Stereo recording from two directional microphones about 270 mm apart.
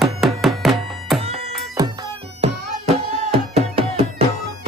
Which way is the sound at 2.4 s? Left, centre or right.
Right.